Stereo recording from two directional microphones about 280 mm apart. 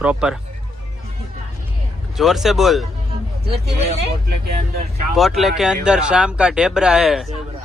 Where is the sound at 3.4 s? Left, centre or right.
Right.